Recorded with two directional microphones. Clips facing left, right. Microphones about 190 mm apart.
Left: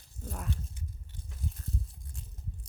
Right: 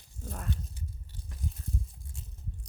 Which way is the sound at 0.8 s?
35° right (ahead or behind).